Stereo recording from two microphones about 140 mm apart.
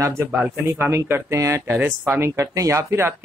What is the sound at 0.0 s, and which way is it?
Speech, 15° right (ahead or behind).